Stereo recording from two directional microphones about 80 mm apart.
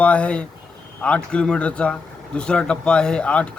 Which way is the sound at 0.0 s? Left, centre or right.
Centre.